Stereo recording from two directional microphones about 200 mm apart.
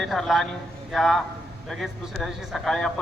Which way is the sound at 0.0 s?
Centre (ahead or behind).